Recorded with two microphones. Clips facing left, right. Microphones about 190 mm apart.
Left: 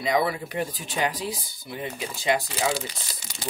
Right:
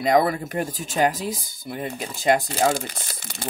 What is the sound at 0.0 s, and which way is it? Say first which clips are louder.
Speech: right 5 dB; 50° right (ahead or behind).